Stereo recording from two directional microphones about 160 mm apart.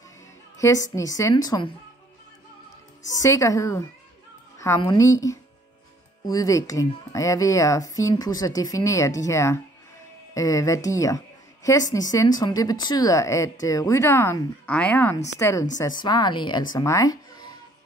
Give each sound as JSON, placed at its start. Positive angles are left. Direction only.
{"t": 0.6, "sound": "a woman's voice", "side_deg": 20}
{"t": 3.2, "sound": "a woman's voice", "side_deg": 20}